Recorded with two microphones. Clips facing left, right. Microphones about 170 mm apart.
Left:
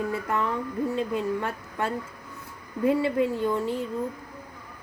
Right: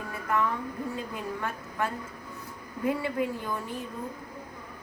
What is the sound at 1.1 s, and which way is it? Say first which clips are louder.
A woman's voice: left 7 dB; 25° left (ahead or behind).